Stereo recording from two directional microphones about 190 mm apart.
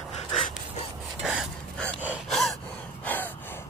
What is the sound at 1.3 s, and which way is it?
Gasp, 5° right (ahead or behind).